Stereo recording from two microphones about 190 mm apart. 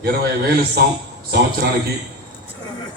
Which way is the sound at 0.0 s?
55° right (ahead or behind).